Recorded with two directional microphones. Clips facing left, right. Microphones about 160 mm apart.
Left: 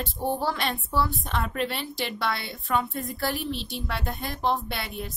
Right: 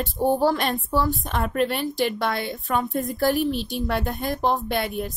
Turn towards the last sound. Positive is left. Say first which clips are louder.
# right 8 dB
turn(degrees=-50)  # may be behind; listen again after turning